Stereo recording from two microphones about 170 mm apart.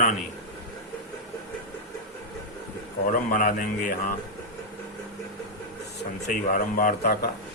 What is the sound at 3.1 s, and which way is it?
Speech, 55° left (ahead or behind).